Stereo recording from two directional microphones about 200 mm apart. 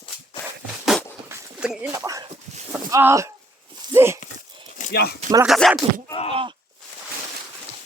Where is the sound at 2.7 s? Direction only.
10° right (ahead or behind).